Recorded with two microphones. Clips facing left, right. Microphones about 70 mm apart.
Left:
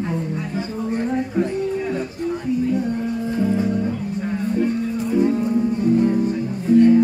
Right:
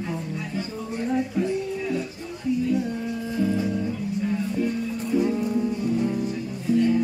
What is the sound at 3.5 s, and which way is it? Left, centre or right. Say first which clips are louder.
Music: left 5 dB; left.